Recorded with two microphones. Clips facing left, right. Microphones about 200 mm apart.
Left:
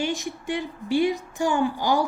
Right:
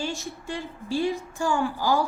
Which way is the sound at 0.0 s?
15° left (ahead or behind).